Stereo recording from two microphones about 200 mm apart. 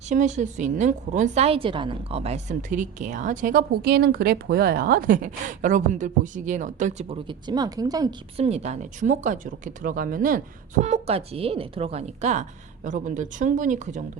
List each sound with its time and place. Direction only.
0.1 s a woman's voice: 35° right (ahead or behind)
7.3 s a woman's voice: 20° right (ahead or behind)
8.4 s a woman's voice: 30° right (ahead or behind)